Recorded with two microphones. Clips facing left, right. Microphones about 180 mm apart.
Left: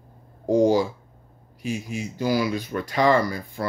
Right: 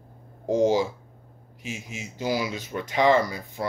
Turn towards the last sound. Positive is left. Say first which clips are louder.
# left 1 dB
turn(degrees=-20)  # may be behind; listen again after turning